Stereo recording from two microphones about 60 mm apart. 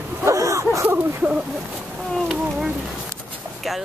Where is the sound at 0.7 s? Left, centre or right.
Right.